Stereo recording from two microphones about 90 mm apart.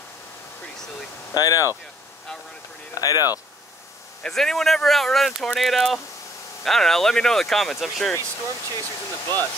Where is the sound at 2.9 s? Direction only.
45° left (ahead or behind).